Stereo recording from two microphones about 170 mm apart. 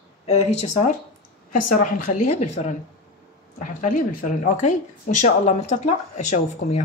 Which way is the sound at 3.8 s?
50° left (ahead or behind).